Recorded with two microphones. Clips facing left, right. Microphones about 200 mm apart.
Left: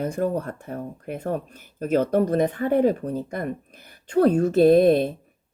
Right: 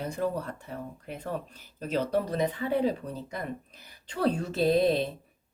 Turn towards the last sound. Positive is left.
turn(degrees=55)  # may be behind; listen again after turning